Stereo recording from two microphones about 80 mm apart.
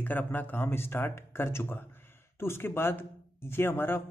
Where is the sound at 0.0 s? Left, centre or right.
Left.